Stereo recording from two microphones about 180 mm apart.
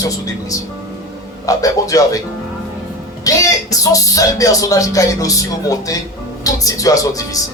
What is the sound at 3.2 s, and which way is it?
Speech, 20° left (ahead or behind).